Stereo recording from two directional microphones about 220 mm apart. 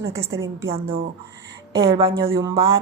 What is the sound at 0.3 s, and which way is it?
A woman's voice, 15° right (ahead or behind).